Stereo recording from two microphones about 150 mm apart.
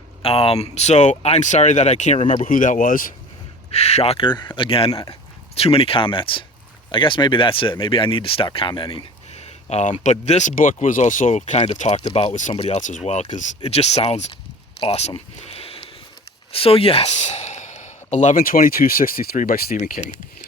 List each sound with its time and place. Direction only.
0.2 s speech: 40° left (ahead or behind); by 3.1 s 65° left (ahead or behind)
3.7 s speech: 45° left (ahead or behind)
4.9 s speech: 25° left (ahead or behind)
5.5 s speech: 40° left (ahead or behind)
9.3 s a sound: 45° left (ahead or behind)
10.0 s speech: 50° left (ahead or behind)
11.8 s speech: 40° left (ahead or behind)
13.3 s speech: 50° left (ahead or behind); by 19.7 s 75° left (ahead or behind)
19.7 s speech: 60° left (ahead or behind)